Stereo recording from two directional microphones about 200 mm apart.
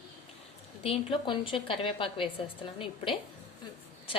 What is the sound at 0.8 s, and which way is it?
A woman's voice, 30° left (ahead or behind).